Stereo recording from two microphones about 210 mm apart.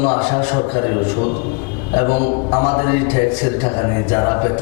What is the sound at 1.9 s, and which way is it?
A man's voice, 30° left (ahead or behind).